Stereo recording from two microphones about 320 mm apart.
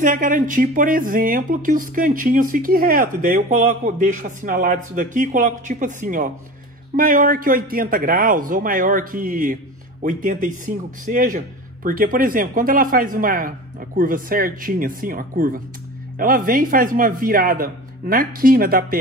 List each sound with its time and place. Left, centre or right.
0.0 s speech: right